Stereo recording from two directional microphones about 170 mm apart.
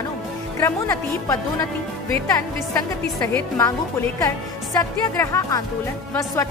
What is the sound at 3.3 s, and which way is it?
A woman's voice, 20° left (ahead or behind).